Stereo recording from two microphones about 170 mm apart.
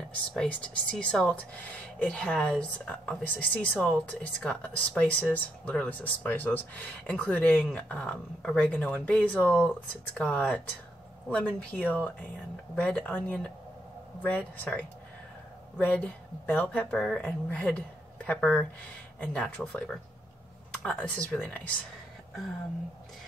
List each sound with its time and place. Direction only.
0.3 s a woman's voice: 5° left (ahead or behind)